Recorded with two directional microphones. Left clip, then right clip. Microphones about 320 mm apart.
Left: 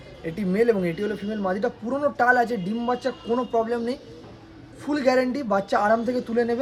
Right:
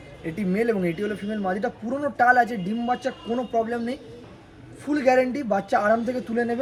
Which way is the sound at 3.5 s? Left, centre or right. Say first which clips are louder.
Even; centre.